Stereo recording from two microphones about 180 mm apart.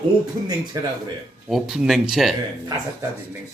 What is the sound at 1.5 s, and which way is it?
Speech, 5° right (ahead or behind).